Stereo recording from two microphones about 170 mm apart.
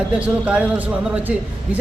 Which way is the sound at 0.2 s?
5° right (ahead or behind).